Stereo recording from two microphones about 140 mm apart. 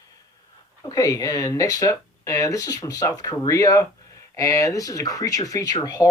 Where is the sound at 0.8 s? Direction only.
25° left (ahead or behind).